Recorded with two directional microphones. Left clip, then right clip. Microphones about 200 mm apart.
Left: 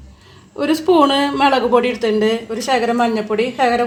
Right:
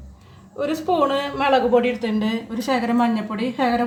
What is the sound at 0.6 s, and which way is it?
A woman's voice, 40° left (ahead or behind).